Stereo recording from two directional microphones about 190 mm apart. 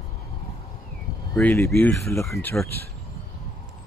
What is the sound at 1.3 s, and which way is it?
Speech, 10° left (ahead or behind).